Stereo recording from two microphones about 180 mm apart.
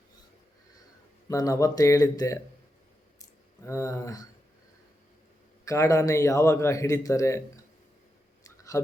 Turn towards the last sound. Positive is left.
turn(degrees=15)  # may be behind; listen again after turning